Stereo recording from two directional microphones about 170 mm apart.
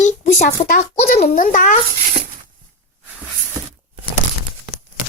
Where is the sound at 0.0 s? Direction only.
45° left (ahead or behind).